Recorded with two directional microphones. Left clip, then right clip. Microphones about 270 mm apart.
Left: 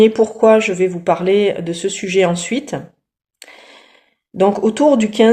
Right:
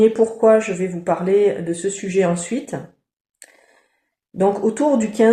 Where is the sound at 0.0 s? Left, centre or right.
Left.